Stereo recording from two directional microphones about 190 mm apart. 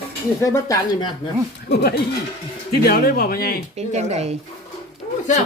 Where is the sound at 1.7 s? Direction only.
55° left (ahead or behind).